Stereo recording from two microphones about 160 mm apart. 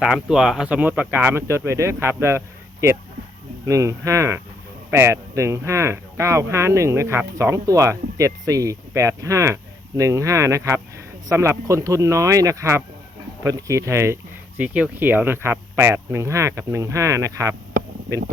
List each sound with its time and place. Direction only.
0.0 s speech: 5° right (ahead or behind)
3.7 s speech: 20° right (ahead or behind)